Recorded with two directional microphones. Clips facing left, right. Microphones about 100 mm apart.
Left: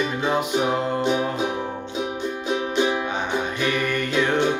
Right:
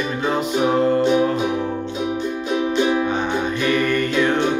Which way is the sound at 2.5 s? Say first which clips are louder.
Right 3 dB; 20° left (ahead or behind).